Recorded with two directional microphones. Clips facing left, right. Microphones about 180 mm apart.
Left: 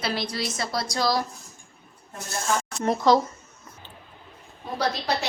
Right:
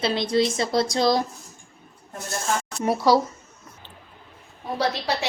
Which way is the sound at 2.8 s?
10° right (ahead or behind).